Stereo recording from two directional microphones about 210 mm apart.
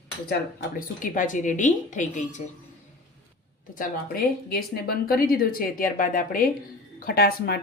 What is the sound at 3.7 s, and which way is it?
Speech, 40° left (ahead or behind).